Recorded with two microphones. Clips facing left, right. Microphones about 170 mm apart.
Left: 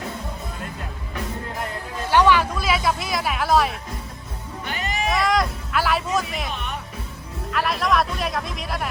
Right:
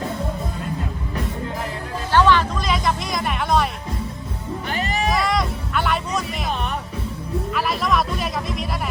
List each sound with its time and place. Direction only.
2.0 s music: 10° left (ahead or behind)
4.6 s music: 35° right (ahead or behind)
5.1 s music: centre (ahead or behind)
6.5 s music: 40° right (ahead or behind)
7.5 s music: centre (ahead or behind)